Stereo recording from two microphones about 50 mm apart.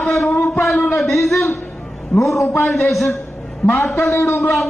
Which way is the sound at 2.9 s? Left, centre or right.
Centre.